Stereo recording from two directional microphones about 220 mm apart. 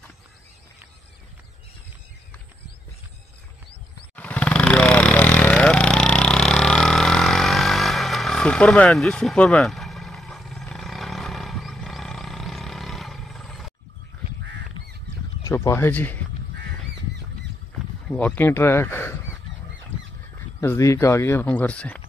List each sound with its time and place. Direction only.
4.1 s vehicle: 5° left (ahead or behind)
14.4 s duck: 55° right (ahead or behind)
15.4 s speech: 10° left (ahead or behind)
18.0 s speech: 5° left (ahead or behind)
20.6 s speech: 10° left (ahead or behind)